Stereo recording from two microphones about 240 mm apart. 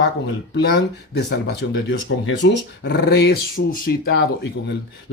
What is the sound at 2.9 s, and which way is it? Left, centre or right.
Speech, left.